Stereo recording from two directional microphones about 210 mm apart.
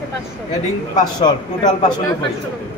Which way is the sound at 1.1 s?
20° left (ahead or behind).